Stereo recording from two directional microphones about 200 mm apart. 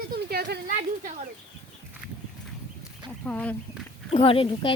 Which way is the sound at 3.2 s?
5° left (ahead or behind).